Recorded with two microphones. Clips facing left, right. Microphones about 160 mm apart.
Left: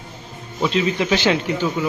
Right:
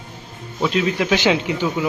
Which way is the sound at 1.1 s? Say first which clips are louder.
Right 1 dB; 15° right (ahead or behind).